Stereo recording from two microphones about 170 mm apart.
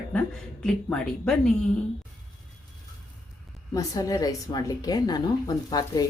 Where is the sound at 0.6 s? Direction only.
5° left (ahead or behind).